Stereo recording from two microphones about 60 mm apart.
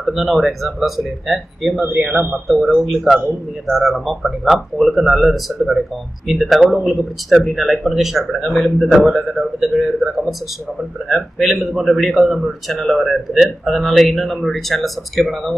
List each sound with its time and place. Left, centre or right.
0.0 s a man's voice: centre
2.0 s a man's voice: centre
2.3 s a man's voice: centre